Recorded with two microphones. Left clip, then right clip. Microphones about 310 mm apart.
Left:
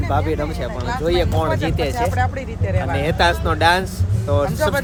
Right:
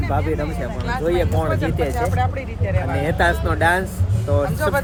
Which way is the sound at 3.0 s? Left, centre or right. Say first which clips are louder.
Left 2 dB; centre.